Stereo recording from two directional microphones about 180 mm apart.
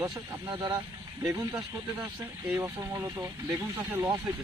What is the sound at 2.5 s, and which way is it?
Speech, 15° right (ahead or behind).